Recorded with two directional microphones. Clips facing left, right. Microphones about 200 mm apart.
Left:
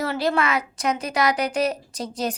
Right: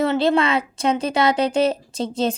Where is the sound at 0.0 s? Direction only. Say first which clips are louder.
Right 5 dB; 25° right (ahead or behind).